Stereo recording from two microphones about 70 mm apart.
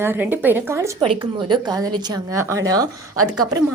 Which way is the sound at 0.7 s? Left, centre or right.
Right.